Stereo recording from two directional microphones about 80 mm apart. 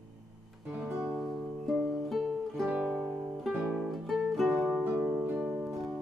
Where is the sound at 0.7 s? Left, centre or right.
Centre.